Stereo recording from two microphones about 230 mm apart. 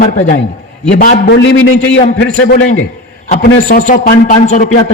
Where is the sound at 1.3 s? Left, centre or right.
Left.